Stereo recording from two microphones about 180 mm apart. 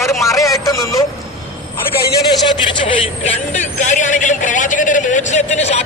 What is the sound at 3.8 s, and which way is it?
A man's voice, 45° left (ahead or behind).